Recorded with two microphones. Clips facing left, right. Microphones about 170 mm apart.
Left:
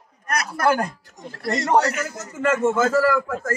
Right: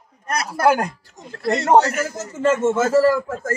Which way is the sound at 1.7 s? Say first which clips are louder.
Right 4 dB; 45° right (ahead or behind).